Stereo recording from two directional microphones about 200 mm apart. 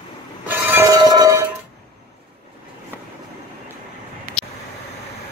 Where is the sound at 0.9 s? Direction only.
20° right (ahead or behind).